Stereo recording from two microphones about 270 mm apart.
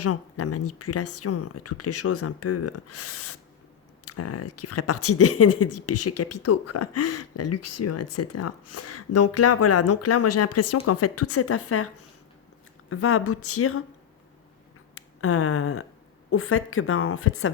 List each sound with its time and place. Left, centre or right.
0.0 s speech: left
12.9 s a woman's voice: left
14.9 s a woman's voice: left